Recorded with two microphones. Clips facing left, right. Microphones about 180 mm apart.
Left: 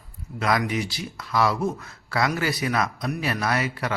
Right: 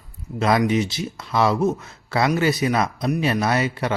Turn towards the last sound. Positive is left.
turn(degrees=-25)  # may be behind; listen again after turning